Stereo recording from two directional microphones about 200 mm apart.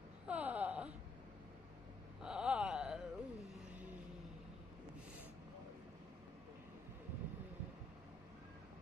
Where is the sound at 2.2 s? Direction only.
5° right (ahead or behind).